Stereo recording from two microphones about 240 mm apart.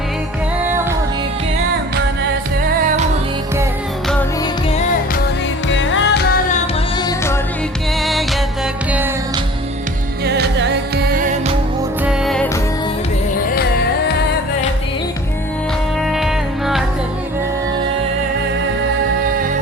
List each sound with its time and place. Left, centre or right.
5.6 s music: left
10.2 s music: right
12.0 s music: centre
16.0 s music: centre